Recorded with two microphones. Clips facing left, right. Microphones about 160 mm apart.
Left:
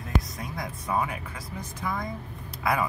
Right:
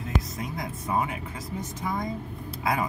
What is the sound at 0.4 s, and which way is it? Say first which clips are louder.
Speech: right 2 dB; 20° right (ahead or behind).